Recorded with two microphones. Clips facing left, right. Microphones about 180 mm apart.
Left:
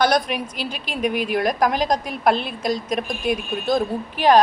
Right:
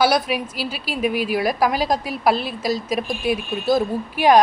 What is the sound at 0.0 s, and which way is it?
A woman's voice, 5° right (ahead or behind).